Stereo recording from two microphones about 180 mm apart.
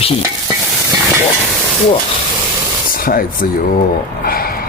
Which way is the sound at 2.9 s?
50° left (ahead or behind).